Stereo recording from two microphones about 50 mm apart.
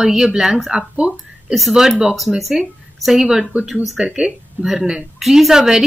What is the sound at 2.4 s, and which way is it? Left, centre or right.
A woman's voice, centre.